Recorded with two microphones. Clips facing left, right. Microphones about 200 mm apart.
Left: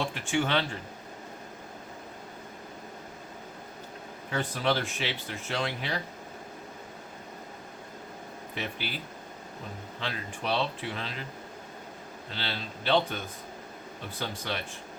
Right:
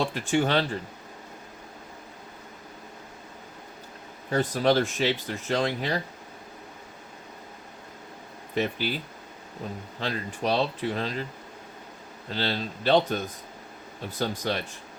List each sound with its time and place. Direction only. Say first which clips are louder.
0.0 s speech: right 4 dB; 40° right (ahead or behind)
4.3 s speech: right 6 dB; 40° right (ahead or behind)
8.5 s speech: right 9 dB; 45° right (ahead or behind)
10.0 s speech: right 6 dB; 40° right (ahead or behind)
12.3 s speech: right 8 dB; 40° right (ahead or behind)